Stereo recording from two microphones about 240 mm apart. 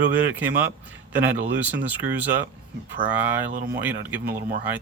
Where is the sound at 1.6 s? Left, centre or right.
Centre.